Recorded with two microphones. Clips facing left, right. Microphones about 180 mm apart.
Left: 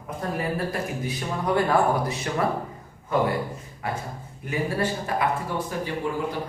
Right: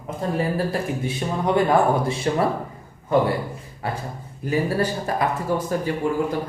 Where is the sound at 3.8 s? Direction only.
30° right (ahead or behind).